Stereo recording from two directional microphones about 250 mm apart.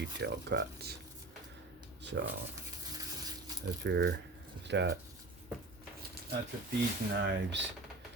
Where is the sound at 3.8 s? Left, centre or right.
Right.